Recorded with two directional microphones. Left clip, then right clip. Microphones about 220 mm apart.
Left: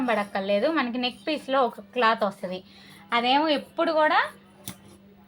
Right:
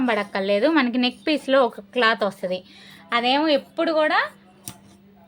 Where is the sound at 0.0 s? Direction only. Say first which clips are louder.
Right 3 dB; 50° right (ahead or behind).